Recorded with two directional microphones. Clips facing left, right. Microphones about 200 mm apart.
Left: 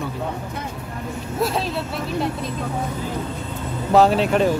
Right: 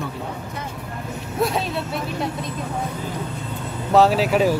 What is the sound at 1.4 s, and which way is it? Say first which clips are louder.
Speech: right 1 dB; centre (ahead or behind).